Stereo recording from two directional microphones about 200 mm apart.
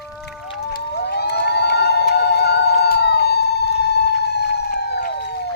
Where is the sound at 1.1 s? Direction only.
55° left (ahead or behind).